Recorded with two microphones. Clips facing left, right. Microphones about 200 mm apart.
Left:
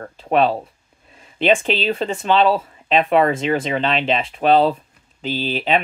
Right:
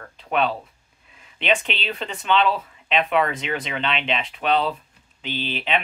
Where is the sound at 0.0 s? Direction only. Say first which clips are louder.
Left 6 dB; 40° left (ahead or behind).